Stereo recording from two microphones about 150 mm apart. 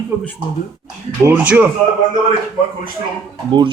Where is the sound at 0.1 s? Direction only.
15° right (ahead or behind).